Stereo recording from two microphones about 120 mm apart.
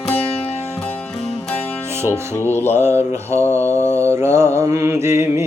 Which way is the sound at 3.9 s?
20° right (ahead or behind).